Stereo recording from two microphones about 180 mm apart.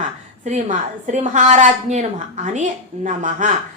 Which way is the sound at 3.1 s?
45° right (ahead or behind).